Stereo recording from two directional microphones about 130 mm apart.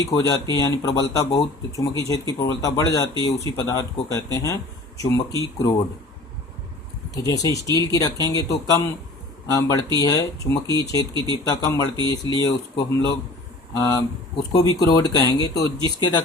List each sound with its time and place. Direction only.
0.0 s speech: 25° left (ahead or behind)
7.1 s speech: 25° left (ahead or behind)